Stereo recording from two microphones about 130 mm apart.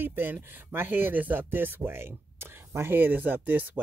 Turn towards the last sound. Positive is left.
turn(degrees=-15)  # may be behind; listen again after turning